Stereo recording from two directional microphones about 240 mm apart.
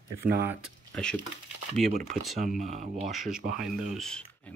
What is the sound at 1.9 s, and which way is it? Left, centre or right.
Speech, right.